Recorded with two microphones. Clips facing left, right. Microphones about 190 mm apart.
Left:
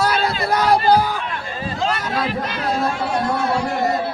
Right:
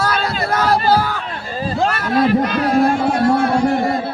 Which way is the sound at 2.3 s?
50° right (ahead or behind).